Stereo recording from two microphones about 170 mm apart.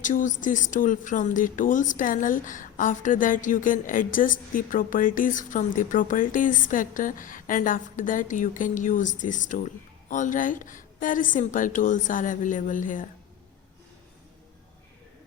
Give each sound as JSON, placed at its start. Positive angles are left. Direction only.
{"t": 0.0, "sound": "speech", "side_deg": 50}